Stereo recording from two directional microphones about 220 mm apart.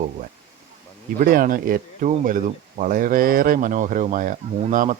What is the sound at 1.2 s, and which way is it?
Speech, 40° right (ahead or behind).